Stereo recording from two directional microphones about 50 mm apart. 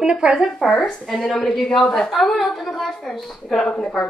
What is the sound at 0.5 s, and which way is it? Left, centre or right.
A woman's voice, centre.